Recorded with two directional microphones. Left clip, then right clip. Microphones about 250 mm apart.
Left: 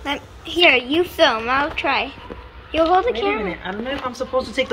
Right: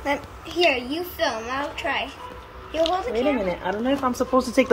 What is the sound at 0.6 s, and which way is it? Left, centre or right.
Speech, left.